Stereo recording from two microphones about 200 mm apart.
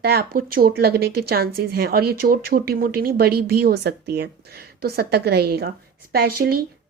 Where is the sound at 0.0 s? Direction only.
50° right (ahead or behind).